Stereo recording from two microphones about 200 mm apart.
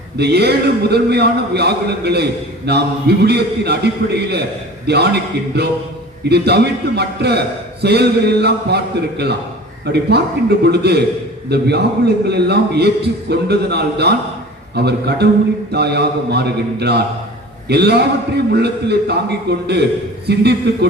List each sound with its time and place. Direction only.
0.2 s a man's voice: 55° right (ahead or behind)